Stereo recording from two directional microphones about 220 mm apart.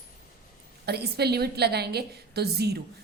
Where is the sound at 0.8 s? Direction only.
45° right (ahead or behind).